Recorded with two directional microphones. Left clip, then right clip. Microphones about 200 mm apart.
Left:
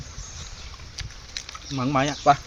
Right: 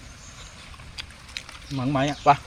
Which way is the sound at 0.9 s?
5° left (ahead or behind).